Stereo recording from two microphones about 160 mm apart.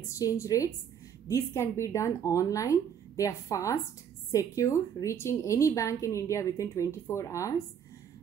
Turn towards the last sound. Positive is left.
turn(degrees=20)  # may be behind; listen again after turning